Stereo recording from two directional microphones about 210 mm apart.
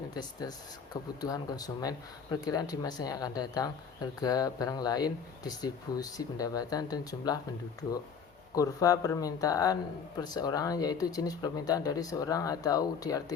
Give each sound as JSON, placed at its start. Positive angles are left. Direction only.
{"t": 0.1, "sound": "speech", "side_deg": 20}
{"t": 8.5, "sound": "speech", "side_deg": 15}